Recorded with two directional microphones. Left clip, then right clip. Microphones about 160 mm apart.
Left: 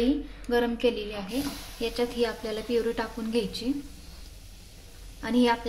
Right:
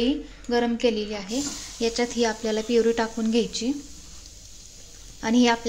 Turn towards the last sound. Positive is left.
turn(degrees=-45)  # may be behind; listen again after turning